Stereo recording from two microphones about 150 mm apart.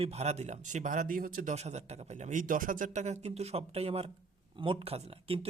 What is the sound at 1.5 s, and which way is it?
Speech, 50° right (ahead or behind).